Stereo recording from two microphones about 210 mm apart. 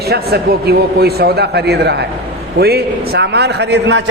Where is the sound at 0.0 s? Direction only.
50° right (ahead or behind).